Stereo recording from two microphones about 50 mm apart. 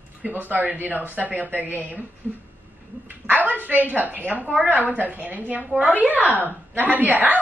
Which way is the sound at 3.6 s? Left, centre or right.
Right.